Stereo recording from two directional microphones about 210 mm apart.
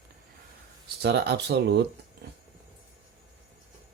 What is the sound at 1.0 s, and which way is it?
Speech, 50° right (ahead or behind).